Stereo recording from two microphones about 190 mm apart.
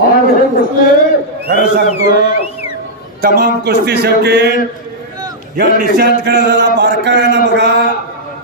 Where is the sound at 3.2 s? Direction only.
55° right (ahead or behind).